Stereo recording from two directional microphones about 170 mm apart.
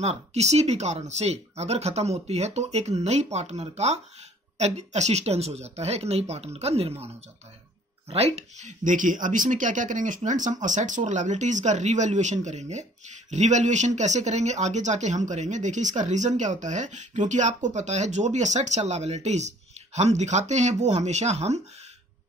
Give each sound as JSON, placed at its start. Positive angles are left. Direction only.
{"t": 0.0, "sound": "speech", "side_deg": -40}
{"t": 8.1, "sound": "speech", "side_deg": -40}